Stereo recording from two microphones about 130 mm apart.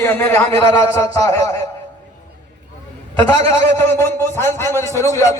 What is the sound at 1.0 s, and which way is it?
Speech, 25° left (ahead or behind).